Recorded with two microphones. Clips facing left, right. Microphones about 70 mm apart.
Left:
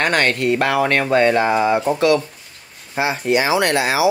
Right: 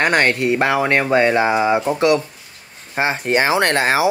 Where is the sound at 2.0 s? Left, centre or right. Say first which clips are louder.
Even; right.